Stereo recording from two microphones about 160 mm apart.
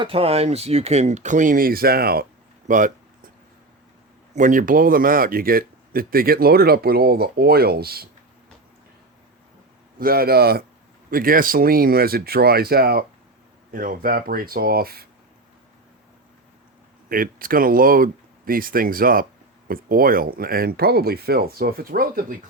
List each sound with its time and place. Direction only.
0.0 s speech: 35° right (ahead or behind); by 2.2 s 75° right (ahead or behind)
2.6 s speech: 55° right (ahead or behind)
4.4 s speech: 55° right (ahead or behind); by 8.0 s 75° right (ahead or behind)
10.0 s speech: 70° right (ahead or behind)
11.1 s speech: 65° right (ahead or behind)
13.7 s speech: 60° right (ahead or behind)
17.1 s speech: 65° right (ahead or behind)